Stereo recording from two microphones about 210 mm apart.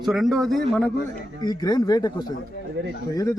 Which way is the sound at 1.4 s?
20° left (ahead or behind).